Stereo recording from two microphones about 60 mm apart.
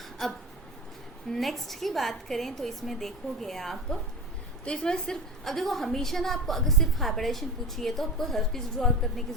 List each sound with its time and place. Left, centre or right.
0.2 s a woman's voice: centre
1.4 s a woman's voice: centre